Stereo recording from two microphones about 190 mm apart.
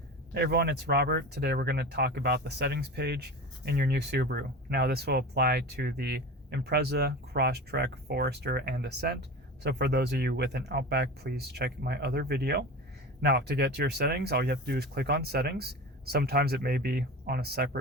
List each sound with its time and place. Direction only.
0.3 s speech: 55° right (ahead or behind)